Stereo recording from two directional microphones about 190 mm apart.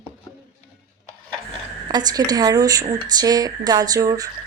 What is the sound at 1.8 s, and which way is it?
Speech, 20° right (ahead or behind).